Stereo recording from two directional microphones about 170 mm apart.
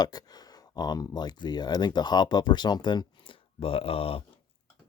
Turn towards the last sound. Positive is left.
turn(degrees=35)  # may be behind; listen again after turning